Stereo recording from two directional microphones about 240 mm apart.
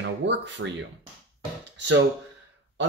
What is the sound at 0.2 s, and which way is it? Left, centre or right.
Speech, right.